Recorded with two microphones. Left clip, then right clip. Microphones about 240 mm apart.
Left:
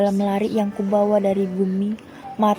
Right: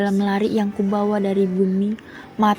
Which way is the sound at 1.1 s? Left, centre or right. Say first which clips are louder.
Left 2 dB; centre.